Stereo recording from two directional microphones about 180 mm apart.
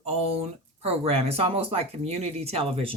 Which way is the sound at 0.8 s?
35° right (ahead or behind).